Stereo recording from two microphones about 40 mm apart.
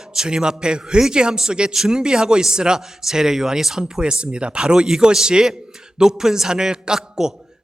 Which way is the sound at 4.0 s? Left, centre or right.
Right.